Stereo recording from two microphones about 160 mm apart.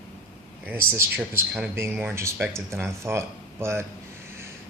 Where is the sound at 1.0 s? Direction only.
15° right (ahead or behind).